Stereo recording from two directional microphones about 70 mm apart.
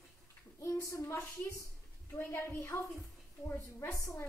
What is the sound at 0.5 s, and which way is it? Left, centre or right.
Speech, left.